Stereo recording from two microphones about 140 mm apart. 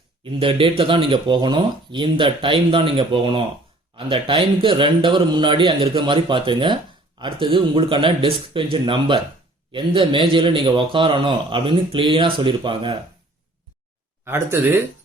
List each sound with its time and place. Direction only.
0.2 s speech: 40° right (ahead or behind)
14.3 s speech: 15° right (ahead or behind)